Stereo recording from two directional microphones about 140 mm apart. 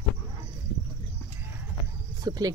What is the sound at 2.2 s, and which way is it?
Cricket, 25° right (ahead or behind).